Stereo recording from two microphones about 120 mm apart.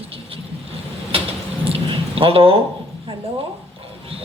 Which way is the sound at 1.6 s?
50° right (ahead or behind).